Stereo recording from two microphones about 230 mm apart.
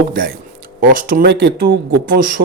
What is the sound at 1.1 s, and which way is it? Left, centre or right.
Speech, right.